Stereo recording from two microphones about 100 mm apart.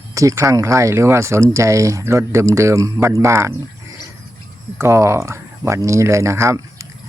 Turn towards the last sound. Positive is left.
turn(degrees=-30)  # may be behind; listen again after turning